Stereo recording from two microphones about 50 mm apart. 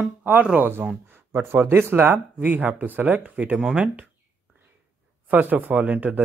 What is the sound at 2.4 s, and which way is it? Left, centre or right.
Speech, right.